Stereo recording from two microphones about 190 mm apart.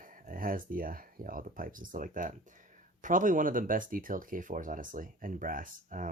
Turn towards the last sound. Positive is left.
turn(degrees=-45)  # may be behind; listen again after turning